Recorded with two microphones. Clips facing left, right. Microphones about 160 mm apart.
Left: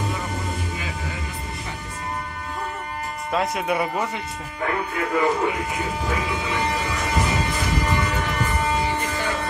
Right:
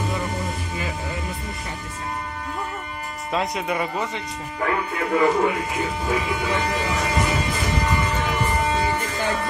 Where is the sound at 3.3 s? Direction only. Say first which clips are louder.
Left 1 dB; 5° left (ahead or behind).